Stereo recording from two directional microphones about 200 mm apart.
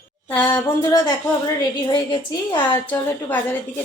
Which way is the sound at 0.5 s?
15° left (ahead or behind).